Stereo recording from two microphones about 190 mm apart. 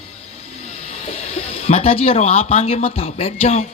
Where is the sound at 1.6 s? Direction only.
35° left (ahead or behind).